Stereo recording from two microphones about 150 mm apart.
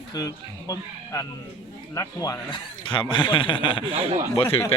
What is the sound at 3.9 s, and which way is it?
Speech, 45° right (ahead or behind).